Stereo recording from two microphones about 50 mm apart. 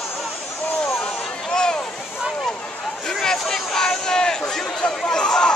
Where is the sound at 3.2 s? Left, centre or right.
Centre.